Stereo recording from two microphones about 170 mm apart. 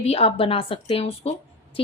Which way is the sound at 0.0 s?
35° left (ahead or behind).